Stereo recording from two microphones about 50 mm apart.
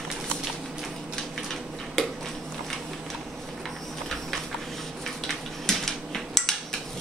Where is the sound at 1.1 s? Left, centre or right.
Centre.